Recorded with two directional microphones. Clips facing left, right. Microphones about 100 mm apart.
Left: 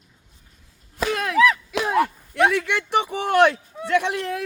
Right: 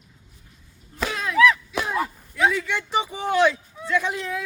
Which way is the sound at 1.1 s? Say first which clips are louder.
Left 5 dB; 55° left (ahead or behind).